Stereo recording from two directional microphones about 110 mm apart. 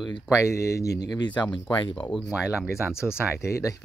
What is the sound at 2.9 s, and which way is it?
Speech, 5° right (ahead or behind).